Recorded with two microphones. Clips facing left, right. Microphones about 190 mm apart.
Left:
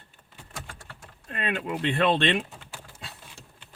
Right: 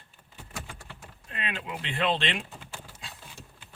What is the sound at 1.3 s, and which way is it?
Speech, 55° left (ahead or behind).